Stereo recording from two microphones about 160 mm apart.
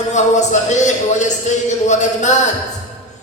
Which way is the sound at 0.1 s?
45° left (ahead or behind).